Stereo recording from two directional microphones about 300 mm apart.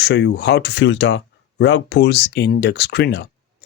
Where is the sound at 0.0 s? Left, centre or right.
Left.